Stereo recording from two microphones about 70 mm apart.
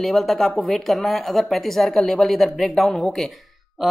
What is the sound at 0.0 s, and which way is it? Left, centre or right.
Speech, centre.